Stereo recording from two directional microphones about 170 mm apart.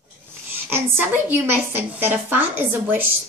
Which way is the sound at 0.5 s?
15° right (ahead or behind).